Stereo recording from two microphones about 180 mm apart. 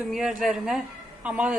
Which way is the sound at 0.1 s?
Centre (ahead or behind).